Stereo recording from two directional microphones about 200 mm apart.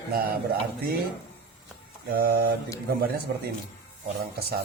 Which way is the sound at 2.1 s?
50° right (ahead or behind).